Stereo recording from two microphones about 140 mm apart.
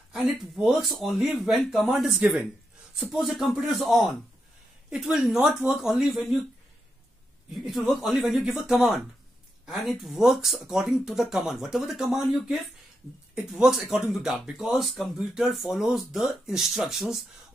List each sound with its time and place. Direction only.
0.6 s speech: centre (ahead or behind)
7.5 s speech: centre (ahead or behind)